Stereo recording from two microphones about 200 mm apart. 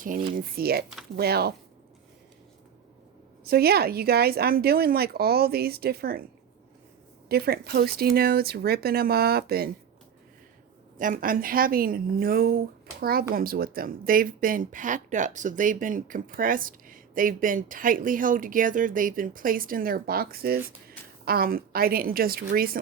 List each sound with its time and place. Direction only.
0.0 s speech: 45° right (ahead or behind)
3.4 s speech: 50° right (ahead or behind)
7.3 s speech: 50° right (ahead or behind)
10.9 s speech: 40° right (ahead or behind)